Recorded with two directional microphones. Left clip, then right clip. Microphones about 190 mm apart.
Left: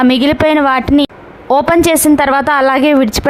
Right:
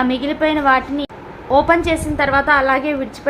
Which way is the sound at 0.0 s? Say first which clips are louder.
Left 7 dB; 60° left (ahead or behind).